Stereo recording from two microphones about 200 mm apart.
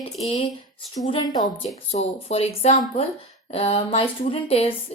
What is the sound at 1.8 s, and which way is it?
A woman's voice, 30° left (ahead or behind).